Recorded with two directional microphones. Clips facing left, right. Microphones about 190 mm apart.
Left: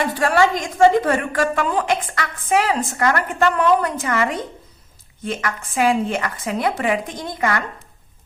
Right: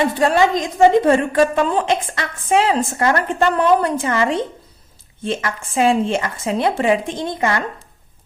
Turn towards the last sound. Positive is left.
turn(degrees=-25)  # may be behind; listen again after turning